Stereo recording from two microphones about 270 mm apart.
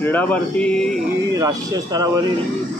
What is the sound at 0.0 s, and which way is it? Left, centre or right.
Speech, centre.